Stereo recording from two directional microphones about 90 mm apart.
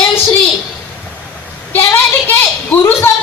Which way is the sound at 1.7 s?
25° left (ahead or behind).